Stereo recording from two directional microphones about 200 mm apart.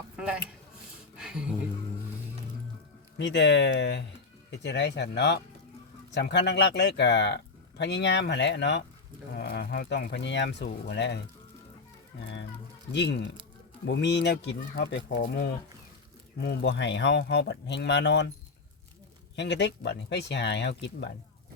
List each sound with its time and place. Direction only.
1.1 s a sound: 5° right (ahead or behind)
3.2 s speech: 60° left (ahead or behind)
12.9 s speech: 60° left (ahead or behind)
19.4 s speech: 60° left (ahead or behind)